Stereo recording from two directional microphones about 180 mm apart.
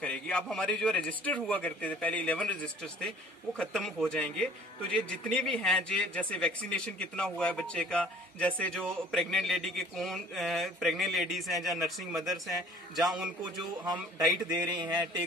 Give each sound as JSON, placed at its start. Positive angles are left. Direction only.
{"t": 0.0, "sound": "a man's voice", "side_deg": 5}
{"t": 13.4, "sound": "a man's voice", "side_deg": -20}